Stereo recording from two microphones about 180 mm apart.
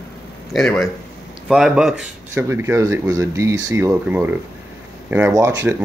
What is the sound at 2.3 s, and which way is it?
Speech, 15° right (ahead or behind).